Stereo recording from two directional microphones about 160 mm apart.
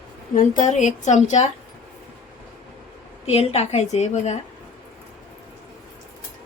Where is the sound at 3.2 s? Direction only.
40° left (ahead or behind).